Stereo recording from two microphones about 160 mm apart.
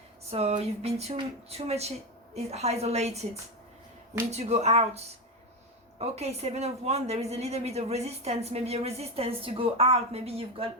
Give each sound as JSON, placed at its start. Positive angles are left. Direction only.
{"t": 0.3, "sound": "speech", "side_deg": -40}
{"t": 4.3, "sound": "speech", "side_deg": -40}